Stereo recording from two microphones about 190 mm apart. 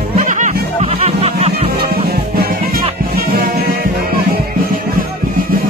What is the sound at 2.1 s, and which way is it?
Music, 55° right (ahead or behind).